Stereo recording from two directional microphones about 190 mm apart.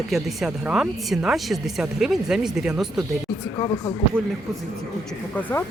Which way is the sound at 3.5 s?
20° left (ahead or behind).